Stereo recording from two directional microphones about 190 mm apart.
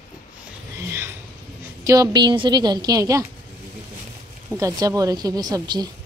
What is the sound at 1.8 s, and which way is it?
A woman's voice, 20° right (ahead or behind).